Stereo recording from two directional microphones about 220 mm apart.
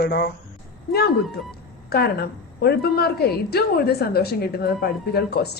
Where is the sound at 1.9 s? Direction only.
45° left (ahead or behind).